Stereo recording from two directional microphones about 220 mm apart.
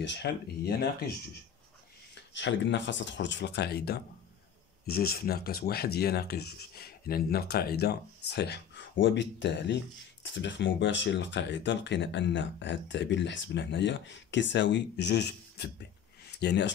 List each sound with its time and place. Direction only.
0.0 s speech: 50° left (ahead or behind)
2.1 s speech: 55° left (ahead or behind)